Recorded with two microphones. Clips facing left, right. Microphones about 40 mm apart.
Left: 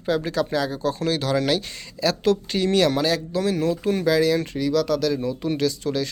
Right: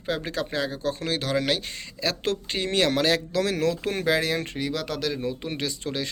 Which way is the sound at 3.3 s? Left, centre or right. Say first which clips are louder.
Left 2 dB; right.